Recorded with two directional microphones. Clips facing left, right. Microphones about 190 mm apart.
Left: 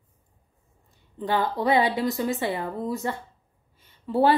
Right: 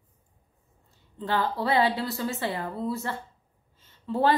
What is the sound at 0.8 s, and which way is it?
A woman's voice, 15° left (ahead or behind).